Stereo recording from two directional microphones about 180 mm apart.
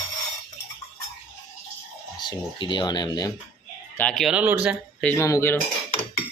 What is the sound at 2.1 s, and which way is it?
Speech, 25° left (ahead or behind).